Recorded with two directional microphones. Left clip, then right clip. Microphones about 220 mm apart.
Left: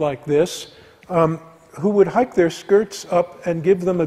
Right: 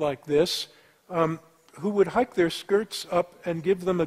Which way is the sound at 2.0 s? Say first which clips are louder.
Left 6 dB; 30° right (ahead or behind).